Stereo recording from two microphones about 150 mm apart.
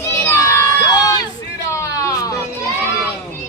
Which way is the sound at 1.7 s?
20° left (ahead or behind).